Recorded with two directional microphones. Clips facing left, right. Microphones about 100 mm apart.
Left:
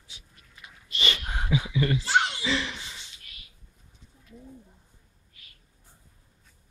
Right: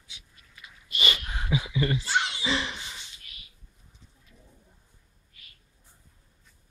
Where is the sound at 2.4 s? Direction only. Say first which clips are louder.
Even; 20° right (ahead or behind).